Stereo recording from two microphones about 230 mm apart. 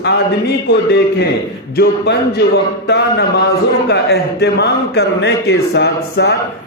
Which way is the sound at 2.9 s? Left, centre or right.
Left.